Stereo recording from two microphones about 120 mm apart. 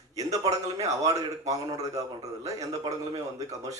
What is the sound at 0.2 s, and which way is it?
A man's voice, 30° right (ahead or behind).